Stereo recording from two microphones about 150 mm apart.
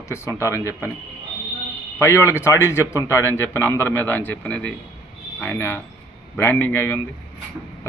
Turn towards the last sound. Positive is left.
turn(degrees=15)  # may be behind; listen again after turning